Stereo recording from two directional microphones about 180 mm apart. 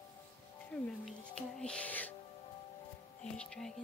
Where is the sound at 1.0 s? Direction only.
5° left (ahead or behind).